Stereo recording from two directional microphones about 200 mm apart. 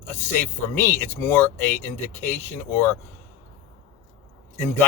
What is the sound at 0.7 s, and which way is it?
A man's voice, 10° left (ahead or behind).